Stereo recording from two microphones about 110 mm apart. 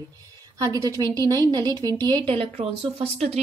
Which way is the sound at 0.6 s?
30° right (ahead or behind).